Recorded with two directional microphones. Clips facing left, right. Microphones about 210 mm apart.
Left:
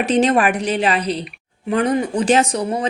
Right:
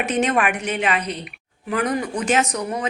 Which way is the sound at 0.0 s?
35° left (ahead or behind).